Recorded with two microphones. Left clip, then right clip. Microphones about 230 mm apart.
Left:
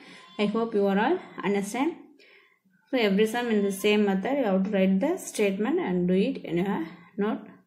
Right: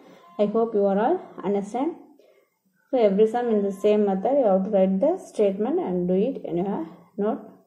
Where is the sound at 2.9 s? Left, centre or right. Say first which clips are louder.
Right 5 dB; left.